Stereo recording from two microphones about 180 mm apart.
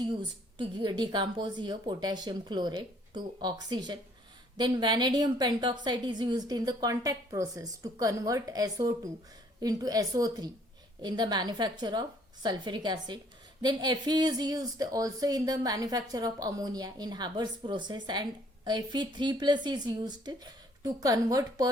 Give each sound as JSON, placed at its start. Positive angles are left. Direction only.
{"t": 0.0, "sound": "speech", "side_deg": -25}